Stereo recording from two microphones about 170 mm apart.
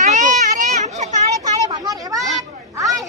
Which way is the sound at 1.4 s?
20° right (ahead or behind).